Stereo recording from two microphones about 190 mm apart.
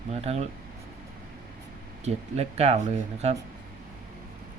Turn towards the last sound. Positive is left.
turn(degrees=-35)  # may be behind; listen again after turning